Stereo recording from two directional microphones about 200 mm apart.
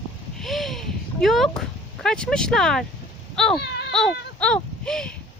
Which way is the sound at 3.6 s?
60° left (ahead or behind).